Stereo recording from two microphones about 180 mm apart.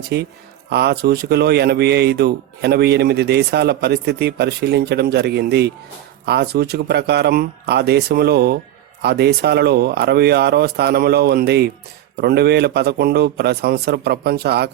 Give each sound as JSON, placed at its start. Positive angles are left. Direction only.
{"t": 0.1, "sound": "speech", "side_deg": -65}